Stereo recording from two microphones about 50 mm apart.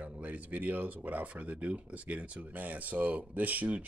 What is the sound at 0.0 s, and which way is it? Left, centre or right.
Speech, right.